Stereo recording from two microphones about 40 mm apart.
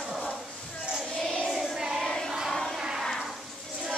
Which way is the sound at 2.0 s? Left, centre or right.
Centre.